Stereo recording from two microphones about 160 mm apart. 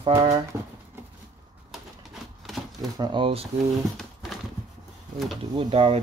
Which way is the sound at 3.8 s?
Centre (ahead or behind).